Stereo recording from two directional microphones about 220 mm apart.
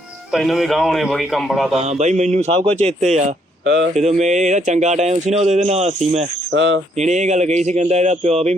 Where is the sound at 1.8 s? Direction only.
30° right (ahead or behind).